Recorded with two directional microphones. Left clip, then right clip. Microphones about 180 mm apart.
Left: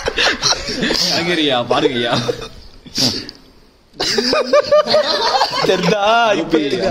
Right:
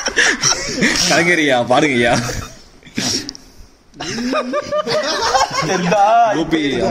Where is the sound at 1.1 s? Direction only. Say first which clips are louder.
Right 3 dB; 40° right (ahead or behind).